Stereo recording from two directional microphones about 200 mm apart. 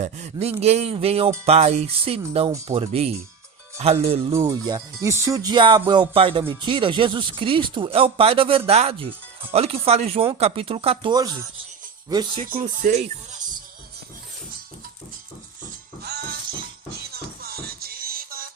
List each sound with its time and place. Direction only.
0.0 s music: 35° right (ahead or behind)
0.6 s speech: 30° right (ahead or behind)
1.5 s music: 35° right (ahead or behind)
4.2 s speech: 15° right (ahead or behind)
9.5 s music: 30° right (ahead or behind)
10.3 s speech: 30° right (ahead or behind)
12.5 s music: 40° right (ahead or behind)
16.0 s music: 55° right (ahead or behind)